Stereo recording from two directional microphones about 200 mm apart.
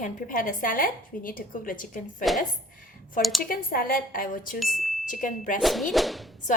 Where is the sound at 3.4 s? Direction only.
45° left (ahead or behind).